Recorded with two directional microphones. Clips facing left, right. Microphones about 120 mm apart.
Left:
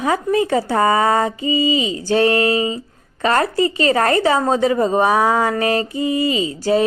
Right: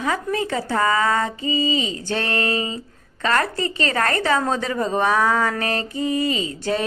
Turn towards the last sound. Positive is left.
turn(degrees=-45)  # may be behind; listen again after turning